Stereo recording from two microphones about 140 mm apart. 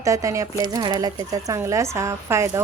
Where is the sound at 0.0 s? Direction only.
25° right (ahead or behind).